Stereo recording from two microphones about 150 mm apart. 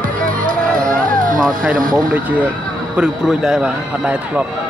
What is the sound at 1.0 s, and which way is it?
Music, 65° right (ahead or behind).